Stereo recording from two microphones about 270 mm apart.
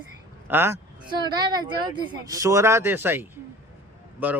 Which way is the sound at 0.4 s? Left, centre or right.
Centre.